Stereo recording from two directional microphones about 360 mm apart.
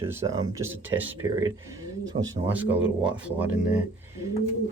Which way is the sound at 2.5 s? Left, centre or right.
Centre.